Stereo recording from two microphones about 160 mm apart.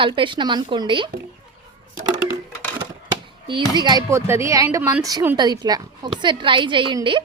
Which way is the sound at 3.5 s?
25° right (ahead or behind).